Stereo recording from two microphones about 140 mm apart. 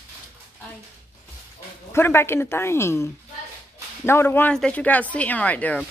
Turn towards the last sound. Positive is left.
turn(degrees=10)  # may be behind; listen again after turning